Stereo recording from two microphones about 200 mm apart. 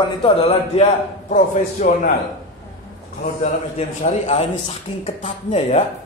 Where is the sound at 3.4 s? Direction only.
35° left (ahead or behind).